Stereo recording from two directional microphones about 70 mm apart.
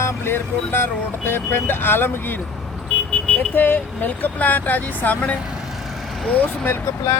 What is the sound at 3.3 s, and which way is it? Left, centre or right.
Speech, left.